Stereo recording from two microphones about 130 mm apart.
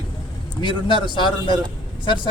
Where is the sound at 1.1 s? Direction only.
40° left (ahead or behind).